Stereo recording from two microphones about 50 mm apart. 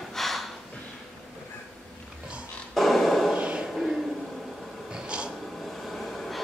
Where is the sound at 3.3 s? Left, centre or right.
Right.